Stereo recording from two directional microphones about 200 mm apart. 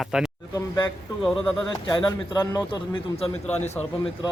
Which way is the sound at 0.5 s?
15° left (ahead or behind).